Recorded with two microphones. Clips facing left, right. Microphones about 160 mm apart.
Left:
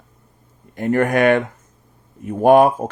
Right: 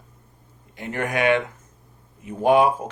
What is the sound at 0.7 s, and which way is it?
Speech, 50° left (ahead or behind).